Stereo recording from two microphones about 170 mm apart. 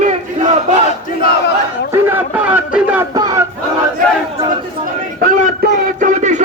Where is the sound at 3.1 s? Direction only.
25° right (ahead or behind).